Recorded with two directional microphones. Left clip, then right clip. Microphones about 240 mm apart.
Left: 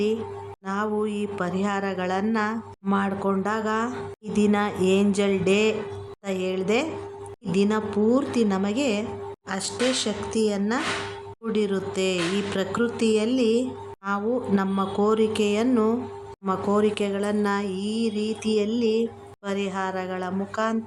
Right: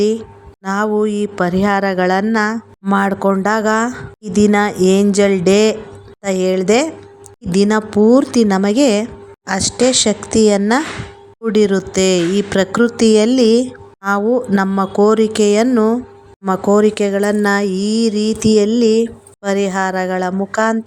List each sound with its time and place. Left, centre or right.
0.6 s speech: right